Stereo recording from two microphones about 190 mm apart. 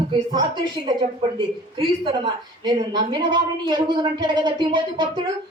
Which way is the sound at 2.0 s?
25° right (ahead or behind).